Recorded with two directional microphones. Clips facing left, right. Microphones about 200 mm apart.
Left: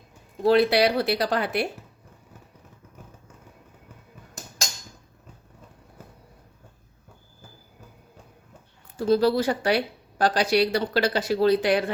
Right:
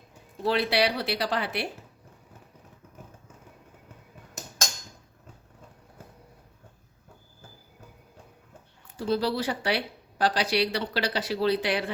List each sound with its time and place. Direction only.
0.4 s speech: 45° left (ahead or behind)
9.0 s speech: 45° left (ahead or behind)